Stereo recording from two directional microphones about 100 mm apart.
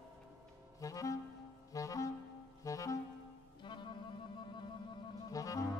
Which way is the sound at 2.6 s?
35° left (ahead or behind).